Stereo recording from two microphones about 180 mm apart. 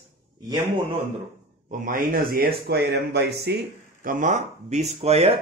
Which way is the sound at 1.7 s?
50° right (ahead or behind).